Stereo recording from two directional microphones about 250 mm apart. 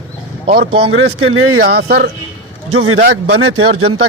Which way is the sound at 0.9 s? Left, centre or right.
Right.